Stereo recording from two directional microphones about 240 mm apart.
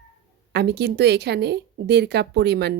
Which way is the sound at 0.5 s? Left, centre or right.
Right.